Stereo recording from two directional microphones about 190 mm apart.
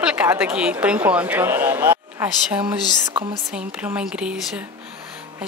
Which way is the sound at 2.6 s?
25° right (ahead or behind).